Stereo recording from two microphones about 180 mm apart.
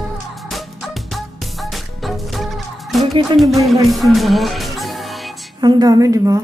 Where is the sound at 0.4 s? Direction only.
Centre (ahead or behind).